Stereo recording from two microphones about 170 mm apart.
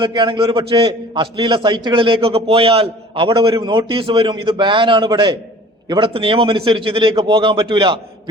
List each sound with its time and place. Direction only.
0.0 s a man's voice: 25° right (ahead or behind)